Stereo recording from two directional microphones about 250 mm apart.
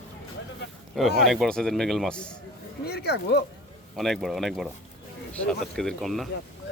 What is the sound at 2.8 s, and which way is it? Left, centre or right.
Speech, left.